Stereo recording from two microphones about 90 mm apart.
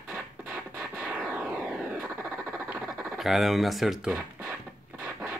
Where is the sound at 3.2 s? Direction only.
Centre (ahead or behind).